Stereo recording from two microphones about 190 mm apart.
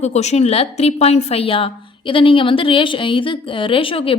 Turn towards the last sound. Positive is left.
turn(degrees=30)  # may be behind; listen again after turning